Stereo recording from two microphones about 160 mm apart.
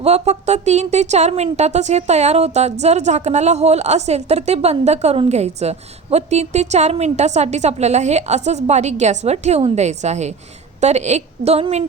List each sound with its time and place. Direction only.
0.0 s a woman's voice: 45° right (ahead or behind)